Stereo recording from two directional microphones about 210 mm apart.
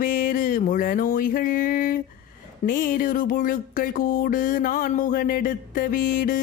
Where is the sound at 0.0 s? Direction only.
40° left (ahead or behind).